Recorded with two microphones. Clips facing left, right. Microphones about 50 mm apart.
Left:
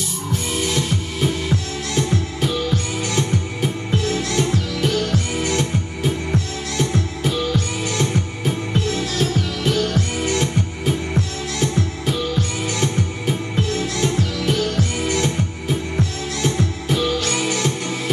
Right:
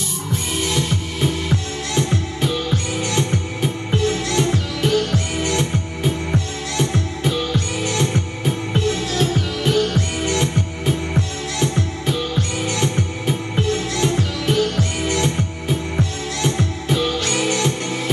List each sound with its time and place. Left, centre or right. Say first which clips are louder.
0.7 s music: even; centre